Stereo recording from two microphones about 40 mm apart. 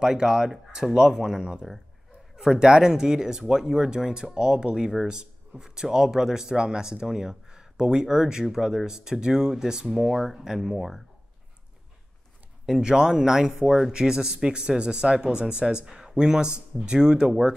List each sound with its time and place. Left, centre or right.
0.0 s speech: centre
0.8 s speech: centre
12.8 s a man's voice: centre